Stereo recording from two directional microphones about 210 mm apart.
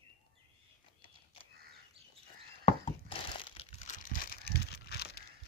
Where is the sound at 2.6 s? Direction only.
25° left (ahead or behind).